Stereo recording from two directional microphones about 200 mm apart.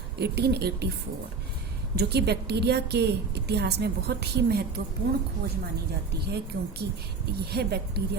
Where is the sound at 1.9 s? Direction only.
55° right (ahead or behind).